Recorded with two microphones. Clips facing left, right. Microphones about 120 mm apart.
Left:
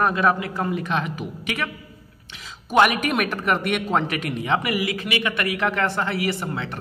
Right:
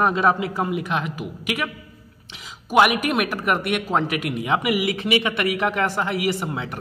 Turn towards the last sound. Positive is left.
turn(degrees=-15)  # may be behind; listen again after turning